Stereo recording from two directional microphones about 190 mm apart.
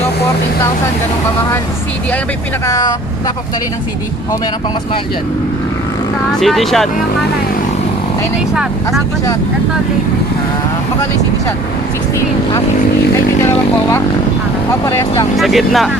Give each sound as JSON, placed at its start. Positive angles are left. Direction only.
{"t": 2.6, "sound": "speech", "side_deg": 20}
{"t": 6.4, "sound": "speech", "side_deg": 0}
{"t": 14.8, "sound": "speech", "side_deg": 15}
{"t": 15.4, "sound": "speech", "side_deg": 0}